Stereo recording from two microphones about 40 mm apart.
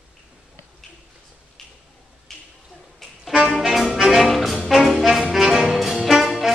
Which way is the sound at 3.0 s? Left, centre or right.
Centre.